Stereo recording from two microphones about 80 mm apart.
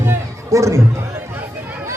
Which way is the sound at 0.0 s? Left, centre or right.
Right.